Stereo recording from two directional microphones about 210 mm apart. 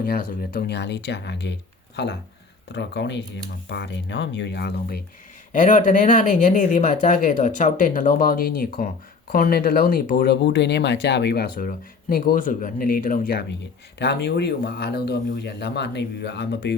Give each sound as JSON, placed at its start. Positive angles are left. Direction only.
{"t": 0.0, "sound": "speech", "side_deg": 45}
{"t": 2.6, "sound": "speech", "side_deg": 55}
{"t": 5.5, "sound": "speech", "side_deg": 35}